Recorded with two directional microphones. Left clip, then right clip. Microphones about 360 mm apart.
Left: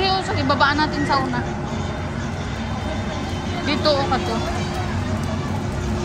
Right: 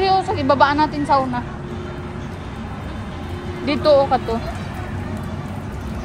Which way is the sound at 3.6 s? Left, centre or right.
Centre.